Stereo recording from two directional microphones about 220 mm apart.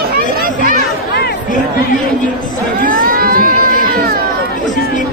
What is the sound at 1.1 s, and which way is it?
Chatter, 45° left (ahead or behind).